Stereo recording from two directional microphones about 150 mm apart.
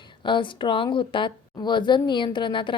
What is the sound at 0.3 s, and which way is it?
A woman's voice, 30° left (ahead or behind).